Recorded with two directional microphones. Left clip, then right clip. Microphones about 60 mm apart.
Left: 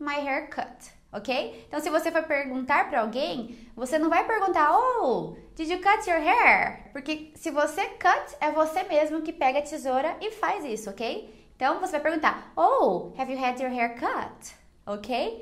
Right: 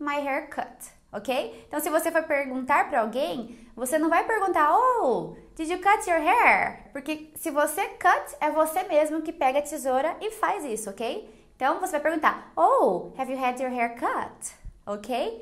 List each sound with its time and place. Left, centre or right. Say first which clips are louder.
0.0 s a woman's voice: right 1 dB; right
2.2 s a woman's voice: right 1 dB; right
2.6 s a woman's voice: right 1 dB; right
4.7 s speech: right 1 dB; centre
5.6 s a woman's voice: right 1 dB; right
8.3 s a woman's voice: right 1 dB; right
9.6 s a woman's voice: right 1 dB; right
9.8 s a woman's voice: right 1 dB; right
10.4 s a woman's voice: right 1 dB; right